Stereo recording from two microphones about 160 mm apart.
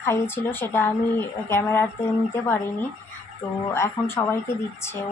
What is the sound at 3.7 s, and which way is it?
Speech, 15° left (ahead or behind).